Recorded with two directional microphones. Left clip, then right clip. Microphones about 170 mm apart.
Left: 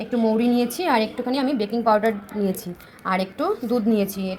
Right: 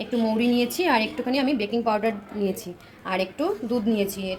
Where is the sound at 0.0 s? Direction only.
10° left (ahead or behind).